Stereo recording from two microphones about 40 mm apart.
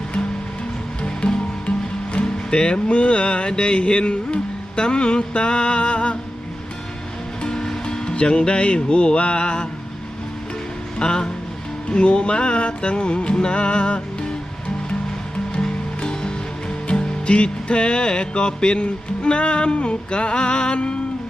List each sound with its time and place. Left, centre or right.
1.0 s music: left
7.4 s speech: centre
10.9 s speech: left
11.9 s music: left
15.5 s music: left